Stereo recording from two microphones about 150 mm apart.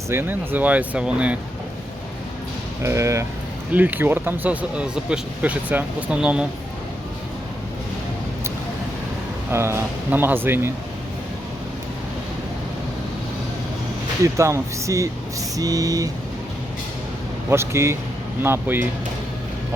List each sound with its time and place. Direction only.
0.1 s speech: 15° right (ahead or behind)
2.8 s speech: 20° right (ahead or behind)
9.5 s speech: 15° right (ahead or behind)
14.3 s speech: 20° right (ahead or behind)
17.5 s speech: 15° right (ahead or behind)